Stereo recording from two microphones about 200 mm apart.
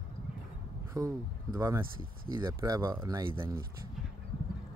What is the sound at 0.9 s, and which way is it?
Speech, 15° right (ahead or behind).